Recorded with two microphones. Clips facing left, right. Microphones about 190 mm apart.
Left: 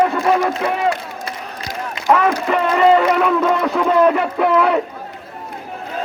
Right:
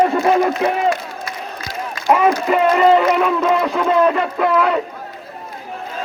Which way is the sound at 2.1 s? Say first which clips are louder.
Right 1 dB; 15° right (ahead or behind).